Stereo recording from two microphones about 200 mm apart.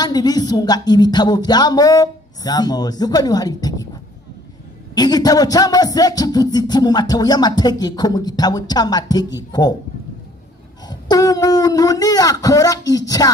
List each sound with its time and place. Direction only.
0.0 s music: 20° left (ahead or behind)
4.9 s music: 20° left (ahead or behind)
10.9 s speech: 20° left (ahead or behind)